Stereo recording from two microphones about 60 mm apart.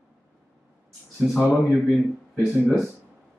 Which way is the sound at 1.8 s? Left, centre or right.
Centre.